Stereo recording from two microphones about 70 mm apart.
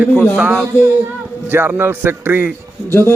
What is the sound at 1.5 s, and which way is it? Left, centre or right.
Speech, right.